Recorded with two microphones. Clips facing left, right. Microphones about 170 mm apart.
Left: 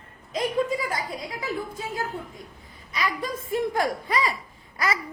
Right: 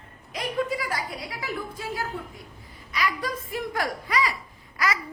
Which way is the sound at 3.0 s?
25° left (ahead or behind).